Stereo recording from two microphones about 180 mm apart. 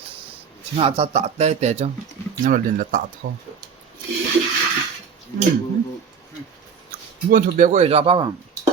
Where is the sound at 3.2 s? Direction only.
60° right (ahead or behind).